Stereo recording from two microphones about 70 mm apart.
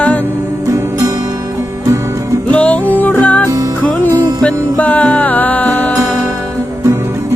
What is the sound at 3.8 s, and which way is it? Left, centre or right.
Music, left.